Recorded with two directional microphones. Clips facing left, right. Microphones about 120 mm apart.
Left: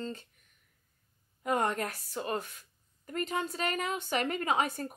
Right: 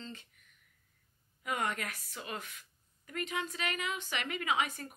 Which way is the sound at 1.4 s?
35° left (ahead or behind).